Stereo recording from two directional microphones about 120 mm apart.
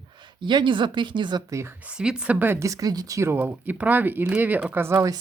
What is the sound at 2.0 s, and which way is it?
Speech, 10° right (ahead or behind).